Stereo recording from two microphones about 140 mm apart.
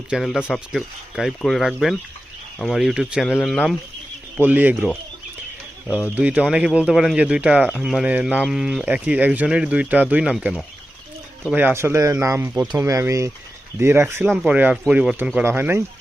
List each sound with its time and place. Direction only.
0.1 s speech: 5° right (ahead or behind)
4.4 s speech: 15° right (ahead or behind)
6.1 s speech: 10° right (ahead or behind)
11.5 s speech: 15° right (ahead or behind)